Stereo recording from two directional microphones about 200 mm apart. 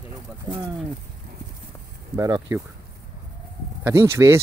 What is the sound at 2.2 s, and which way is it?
Speech, 20° right (ahead or behind).